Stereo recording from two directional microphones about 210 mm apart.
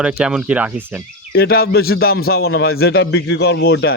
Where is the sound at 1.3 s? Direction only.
45° left (ahead or behind).